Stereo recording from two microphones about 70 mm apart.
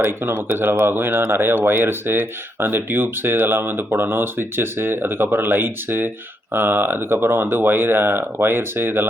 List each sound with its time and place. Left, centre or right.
0.0 s speech: right